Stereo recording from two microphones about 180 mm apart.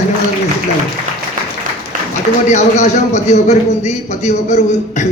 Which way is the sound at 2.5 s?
40° left (ahead or behind).